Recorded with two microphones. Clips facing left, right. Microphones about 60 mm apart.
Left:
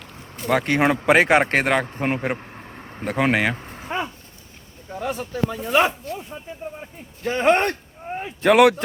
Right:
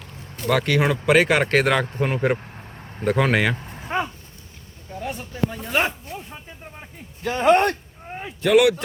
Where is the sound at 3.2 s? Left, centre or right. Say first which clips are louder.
Left 1 dB; centre.